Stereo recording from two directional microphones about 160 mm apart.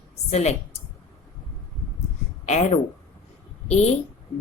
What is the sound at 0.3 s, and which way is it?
Speech, 45° left (ahead or behind).